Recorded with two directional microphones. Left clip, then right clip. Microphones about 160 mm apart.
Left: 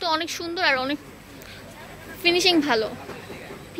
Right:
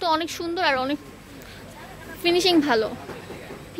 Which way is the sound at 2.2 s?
15° right (ahead or behind).